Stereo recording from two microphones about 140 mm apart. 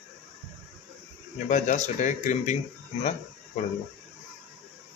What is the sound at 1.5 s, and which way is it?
Speech, 60° left (ahead or behind).